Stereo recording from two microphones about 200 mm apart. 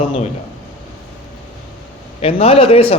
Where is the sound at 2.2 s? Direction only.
30° left (ahead or behind).